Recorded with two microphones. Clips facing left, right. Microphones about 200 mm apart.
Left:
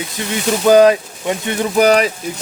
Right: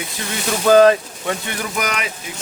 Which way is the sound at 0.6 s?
15° left (ahead or behind).